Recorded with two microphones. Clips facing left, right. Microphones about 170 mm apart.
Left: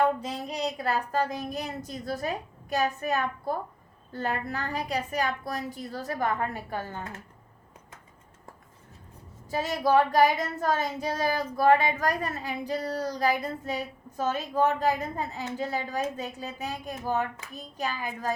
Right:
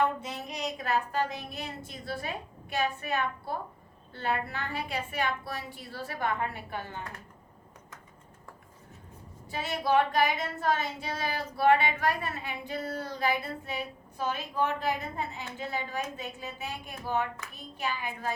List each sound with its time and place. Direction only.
0.0 s speech: 35° left (ahead or behind)
9.5 s speech: 40° left (ahead or behind)